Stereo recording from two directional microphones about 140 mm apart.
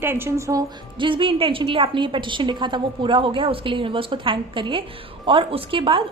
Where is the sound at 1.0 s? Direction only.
40° right (ahead or behind).